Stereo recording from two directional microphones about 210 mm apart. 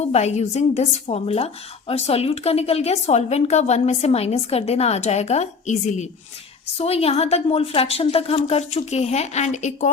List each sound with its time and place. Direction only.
0.0 s a woman's voice: 30° left (ahead or behind)